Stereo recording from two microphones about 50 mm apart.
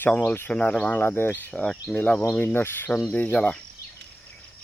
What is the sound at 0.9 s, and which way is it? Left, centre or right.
Speech, left.